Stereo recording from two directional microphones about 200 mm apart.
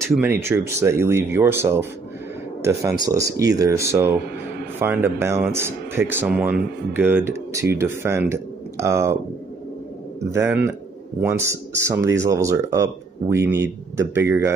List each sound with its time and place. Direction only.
0.1 s speech: 10° right (ahead or behind)
10.3 s speech: 10° right (ahead or behind)